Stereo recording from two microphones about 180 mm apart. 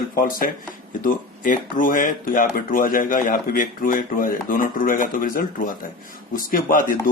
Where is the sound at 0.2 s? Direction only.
55° left (ahead or behind).